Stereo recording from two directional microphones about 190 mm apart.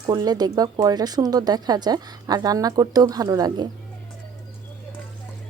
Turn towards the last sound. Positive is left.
turn(degrees=-20)  # may be behind; listen again after turning